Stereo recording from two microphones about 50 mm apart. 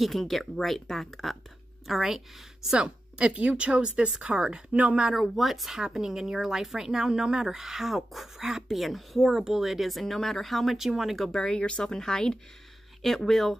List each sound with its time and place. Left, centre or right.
0.0 s speech: centre
1.9 s speech: centre
2.8 s speech: right
5.0 s speech: centre
11.1 s speech: centre
11.4 s speech: centre